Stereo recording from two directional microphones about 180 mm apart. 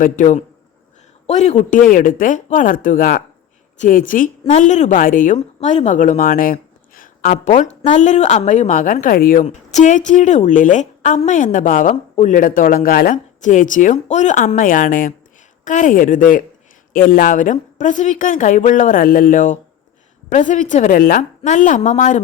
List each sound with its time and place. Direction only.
0.0 s a woman's voice: 45° left (ahead or behind)